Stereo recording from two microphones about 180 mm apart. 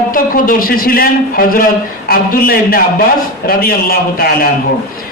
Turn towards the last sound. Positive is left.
turn(degrees=55)  # may be behind; listen again after turning